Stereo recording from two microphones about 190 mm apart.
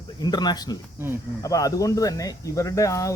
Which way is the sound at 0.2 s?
20° left (ahead or behind).